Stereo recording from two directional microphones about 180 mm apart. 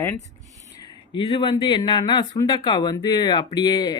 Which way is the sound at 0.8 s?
25° left (ahead or behind).